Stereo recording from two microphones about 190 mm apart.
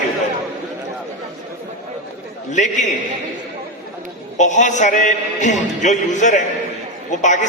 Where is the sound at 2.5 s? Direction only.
40° left (ahead or behind).